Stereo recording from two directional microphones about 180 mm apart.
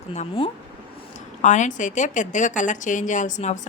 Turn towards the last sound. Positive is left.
turn(degrees=40)  # may be behind; listen again after turning